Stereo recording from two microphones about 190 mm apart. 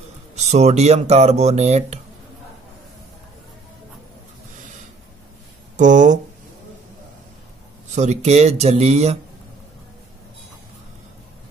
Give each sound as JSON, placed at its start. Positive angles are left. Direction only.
{"t": 0.4, "sound": "speech", "side_deg": -35}
{"t": 5.8, "sound": "speech", "side_deg": -40}
{"t": 7.9, "sound": "speech", "side_deg": -35}